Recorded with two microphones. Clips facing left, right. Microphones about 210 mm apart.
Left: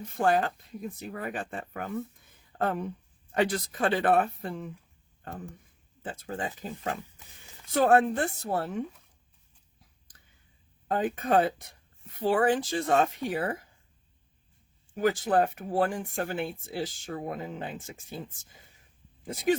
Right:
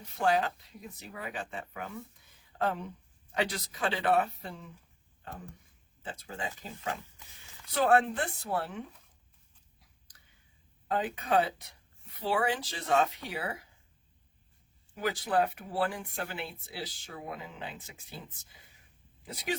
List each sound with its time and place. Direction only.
0.0 s speech: 50° left (ahead or behind)
10.8 s speech: 45° left (ahead or behind)
14.9 s speech: 45° left (ahead or behind)